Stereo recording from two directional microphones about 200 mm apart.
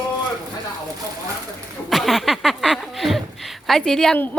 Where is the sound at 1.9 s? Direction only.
Centre (ahead or behind).